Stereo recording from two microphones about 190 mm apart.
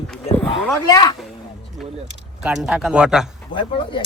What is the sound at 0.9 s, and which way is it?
Speech, 20° left (ahead or behind).